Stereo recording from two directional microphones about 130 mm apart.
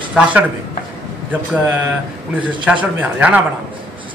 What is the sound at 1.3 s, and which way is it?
A man's voice, 10° right (ahead or behind).